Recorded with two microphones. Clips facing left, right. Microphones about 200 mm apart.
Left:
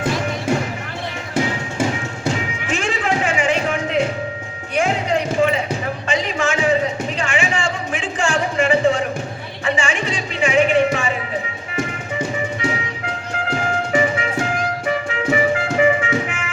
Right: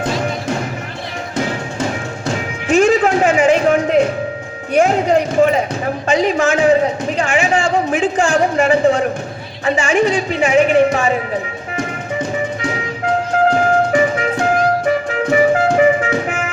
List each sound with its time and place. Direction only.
2.6 s music: 40° right (ahead or behind)
4.7 s a sound: 40° right (ahead or behind)
13.4 s music: 45° right (ahead or behind)